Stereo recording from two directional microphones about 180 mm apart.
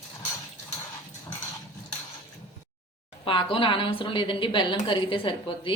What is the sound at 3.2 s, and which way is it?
A woman's voice, 30° left (ahead or behind).